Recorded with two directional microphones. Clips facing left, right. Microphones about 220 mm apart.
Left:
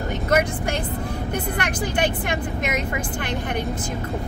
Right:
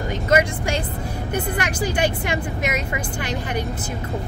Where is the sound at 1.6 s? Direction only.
10° right (ahead or behind).